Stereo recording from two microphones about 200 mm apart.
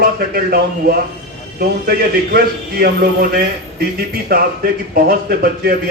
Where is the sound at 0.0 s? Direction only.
45° right (ahead or behind).